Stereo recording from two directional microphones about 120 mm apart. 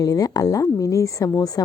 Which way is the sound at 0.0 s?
30° left (ahead or behind).